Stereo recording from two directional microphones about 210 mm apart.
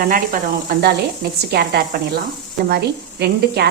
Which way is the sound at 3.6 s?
50° right (ahead or behind).